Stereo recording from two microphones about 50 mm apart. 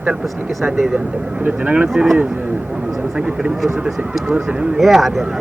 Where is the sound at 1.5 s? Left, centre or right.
Right.